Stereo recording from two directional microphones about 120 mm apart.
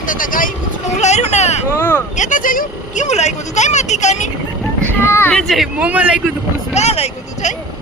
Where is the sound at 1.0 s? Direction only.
70° left (ahead or behind).